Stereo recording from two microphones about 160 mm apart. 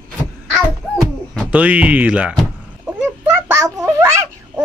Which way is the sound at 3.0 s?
15° right (ahead or behind).